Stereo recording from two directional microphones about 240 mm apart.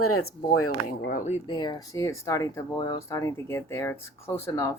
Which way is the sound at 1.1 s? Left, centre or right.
Left.